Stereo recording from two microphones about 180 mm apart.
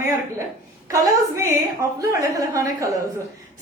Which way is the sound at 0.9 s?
15° right (ahead or behind).